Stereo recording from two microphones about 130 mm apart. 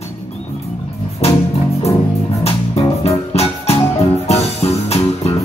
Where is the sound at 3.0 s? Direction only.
50° left (ahead or behind).